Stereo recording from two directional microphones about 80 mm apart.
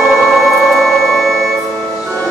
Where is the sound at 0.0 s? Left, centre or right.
Centre.